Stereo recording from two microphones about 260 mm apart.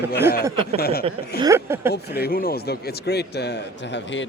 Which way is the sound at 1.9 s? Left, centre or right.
Left.